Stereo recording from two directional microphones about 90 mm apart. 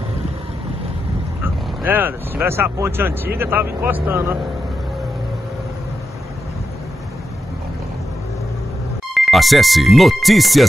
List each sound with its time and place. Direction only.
1.8 s speech: 20° right (ahead or behind)
9.1 s speech: centre (ahead or behind)